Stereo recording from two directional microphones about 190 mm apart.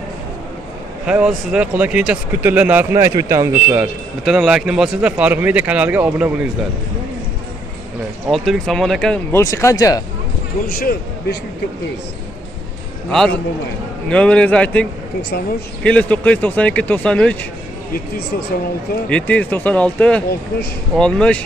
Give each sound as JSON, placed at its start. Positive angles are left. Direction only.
{"t": 1.0, "sound": "speech", "side_deg": -5}
{"t": 8.3, "sound": "speech", "side_deg": 0}
{"t": 9.3, "sound": "speech", "side_deg": 15}
{"t": 10.7, "sound": "speech", "side_deg": 55}
{"t": 14.0, "sound": "speech", "side_deg": 5}
{"t": 19.0, "sound": "speech", "side_deg": 5}